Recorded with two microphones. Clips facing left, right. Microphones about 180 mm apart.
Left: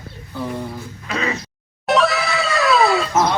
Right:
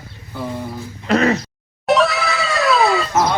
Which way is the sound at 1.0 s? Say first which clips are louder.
Right 9 dB; 60° right (ahead or behind).